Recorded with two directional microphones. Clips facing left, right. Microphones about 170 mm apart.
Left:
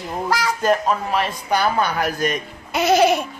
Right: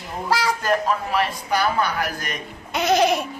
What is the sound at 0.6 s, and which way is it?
Speech, 20° left (ahead or behind).